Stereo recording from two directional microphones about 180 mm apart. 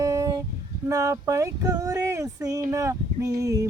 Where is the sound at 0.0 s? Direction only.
15° right (ahead or behind).